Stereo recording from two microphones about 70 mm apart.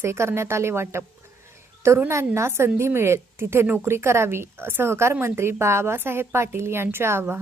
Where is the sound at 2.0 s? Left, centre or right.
Right.